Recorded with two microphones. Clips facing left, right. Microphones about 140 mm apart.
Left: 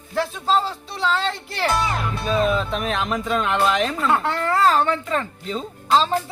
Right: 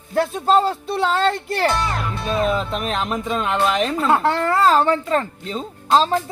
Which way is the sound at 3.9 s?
35° right (ahead or behind).